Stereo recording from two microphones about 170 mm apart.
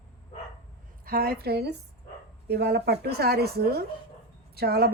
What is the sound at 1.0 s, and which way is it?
A woman's voice, 60° right (ahead or behind).